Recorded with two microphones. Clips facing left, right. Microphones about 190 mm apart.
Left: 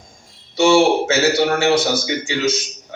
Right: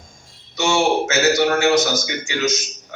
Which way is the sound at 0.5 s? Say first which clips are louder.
Left 5 dB; 30° left (ahead or behind).